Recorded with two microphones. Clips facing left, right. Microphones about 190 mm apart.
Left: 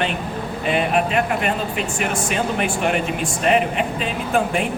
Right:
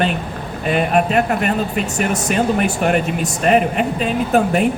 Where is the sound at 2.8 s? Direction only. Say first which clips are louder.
Right 3 dB; 45° right (ahead or behind).